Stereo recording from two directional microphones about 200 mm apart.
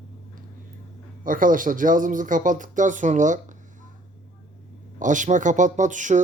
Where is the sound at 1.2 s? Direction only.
45° right (ahead or behind).